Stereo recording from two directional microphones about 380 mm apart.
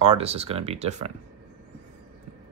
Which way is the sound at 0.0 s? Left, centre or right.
Centre.